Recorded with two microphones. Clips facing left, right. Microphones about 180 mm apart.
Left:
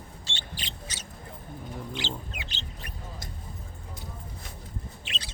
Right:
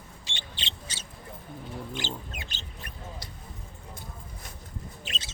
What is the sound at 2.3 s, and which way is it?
Duck, 45° right (ahead or behind).